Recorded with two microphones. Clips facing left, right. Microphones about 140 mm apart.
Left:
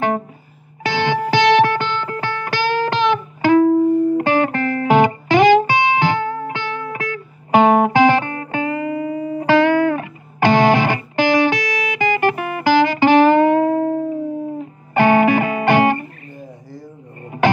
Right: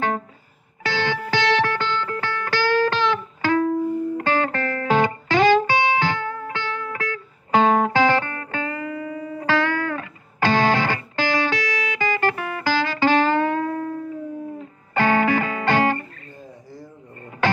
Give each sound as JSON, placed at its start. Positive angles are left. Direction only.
{"t": 0.8, "sound": "music", "side_deg": 15}